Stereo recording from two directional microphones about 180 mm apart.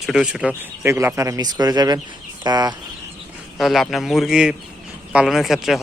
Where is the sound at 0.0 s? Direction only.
Centre (ahead or behind); by 2.7 s 20° right (ahead or behind).